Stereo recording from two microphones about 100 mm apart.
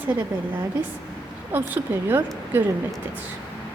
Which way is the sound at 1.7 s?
20° right (ahead or behind).